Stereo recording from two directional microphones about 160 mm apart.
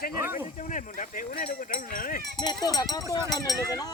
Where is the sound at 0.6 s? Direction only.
50° left (ahead or behind).